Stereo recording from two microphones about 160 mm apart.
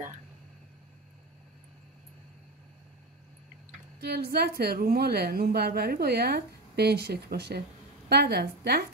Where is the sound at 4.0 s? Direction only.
80° right.